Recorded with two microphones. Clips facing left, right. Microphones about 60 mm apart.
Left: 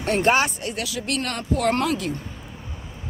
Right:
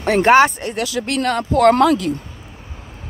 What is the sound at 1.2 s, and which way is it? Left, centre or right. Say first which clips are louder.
Speech: right 11 dB; right.